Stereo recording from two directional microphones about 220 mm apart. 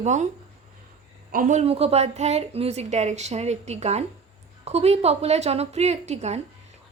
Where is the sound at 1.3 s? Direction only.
35° right (ahead or behind).